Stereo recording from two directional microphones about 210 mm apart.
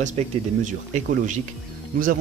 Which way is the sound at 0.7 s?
35° right (ahead or behind).